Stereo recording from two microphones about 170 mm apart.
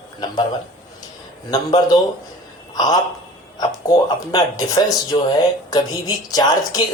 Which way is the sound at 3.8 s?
20° left (ahead or behind).